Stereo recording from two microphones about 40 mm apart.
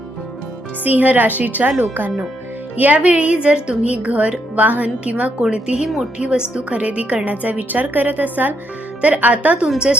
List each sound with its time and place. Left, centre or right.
0.9 s a woman's voice: right
2.7 s speech: right
5.4 s a woman's voice: right
9.7 s speech: right